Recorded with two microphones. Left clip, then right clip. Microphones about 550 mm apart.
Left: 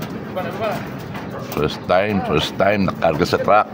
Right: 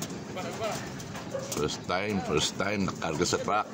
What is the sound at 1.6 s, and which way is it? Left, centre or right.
Speech, right.